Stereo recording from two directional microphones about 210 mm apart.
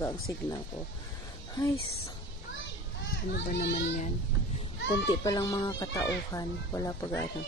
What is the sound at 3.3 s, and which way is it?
Speech, 45° left (ahead or behind).